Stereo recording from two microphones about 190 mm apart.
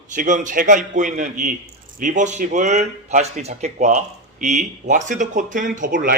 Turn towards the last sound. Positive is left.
turn(degrees=-45)  # may be behind; listen again after turning